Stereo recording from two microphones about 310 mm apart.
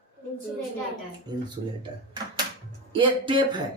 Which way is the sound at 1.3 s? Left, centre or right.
Centre.